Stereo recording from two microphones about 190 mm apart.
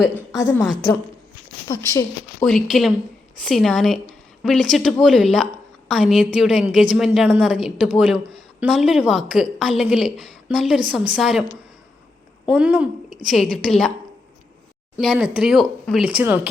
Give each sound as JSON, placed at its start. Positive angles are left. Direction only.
{"t": 0.3, "sound": "a woman's voice", "side_deg": 15}
{"t": 1.6, "sound": "speech", "side_deg": 15}
{"t": 2.4, "sound": "a woman's voice", "side_deg": 0}
{"t": 12.5, "sound": "a woman's voice", "side_deg": -5}
{"t": 14.9, "sound": "speech", "side_deg": -5}